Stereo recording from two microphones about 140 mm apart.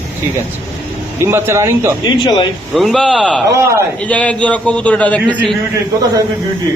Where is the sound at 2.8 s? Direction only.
Centre (ahead or behind).